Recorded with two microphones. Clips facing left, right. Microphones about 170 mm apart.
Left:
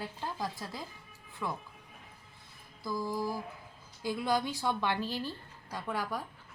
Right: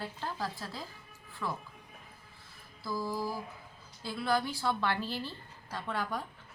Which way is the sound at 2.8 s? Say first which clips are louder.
Left 1 dB; 15° left (ahead or behind).